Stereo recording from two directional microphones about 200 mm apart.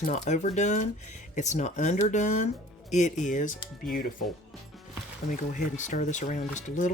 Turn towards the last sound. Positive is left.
turn(degrees=40)  # may be behind; listen again after turning